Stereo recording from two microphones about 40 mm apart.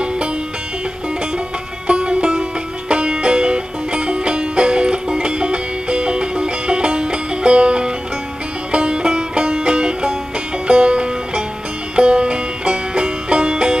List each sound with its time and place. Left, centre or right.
1.9 s music: right